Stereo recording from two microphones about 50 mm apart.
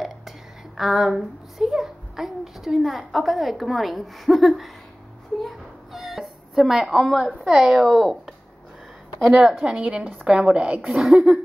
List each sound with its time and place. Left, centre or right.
0.7 s a child's voice: centre
5.9 s cat: centre
7.4 s a woman's voice: centre
9.3 s a woman's voice: centre
11.0 s a woman's voice: centre